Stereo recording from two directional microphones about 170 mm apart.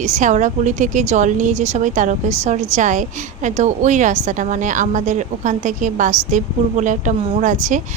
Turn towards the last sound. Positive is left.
turn(degrees=-45)  # may be behind; listen again after turning